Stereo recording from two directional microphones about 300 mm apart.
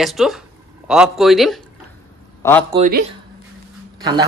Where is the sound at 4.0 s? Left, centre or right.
Centre.